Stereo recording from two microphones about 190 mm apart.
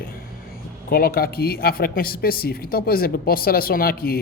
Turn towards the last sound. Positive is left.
turn(degrees=50)  # may be behind; listen again after turning